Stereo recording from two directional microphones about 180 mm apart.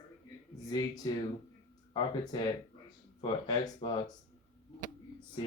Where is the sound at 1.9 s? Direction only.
25° left (ahead or behind).